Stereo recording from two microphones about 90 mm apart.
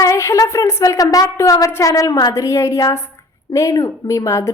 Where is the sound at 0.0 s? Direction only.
35° left (ahead or behind).